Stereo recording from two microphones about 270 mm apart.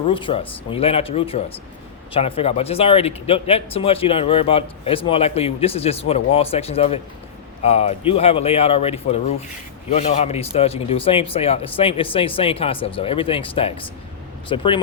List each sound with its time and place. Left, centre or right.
0.1 s speech: centre